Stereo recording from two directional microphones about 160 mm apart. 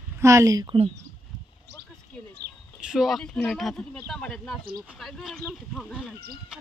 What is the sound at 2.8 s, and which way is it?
Speech, 5° right (ahead or behind).